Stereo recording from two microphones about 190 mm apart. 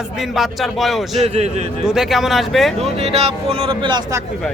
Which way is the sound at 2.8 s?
30° right (ahead or behind).